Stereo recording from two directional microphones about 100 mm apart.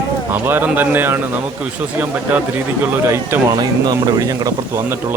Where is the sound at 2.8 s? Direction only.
20° right (ahead or behind).